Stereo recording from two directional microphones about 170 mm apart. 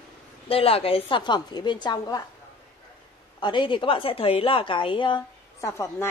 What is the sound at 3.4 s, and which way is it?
A woman's voice, 30° left (ahead or behind).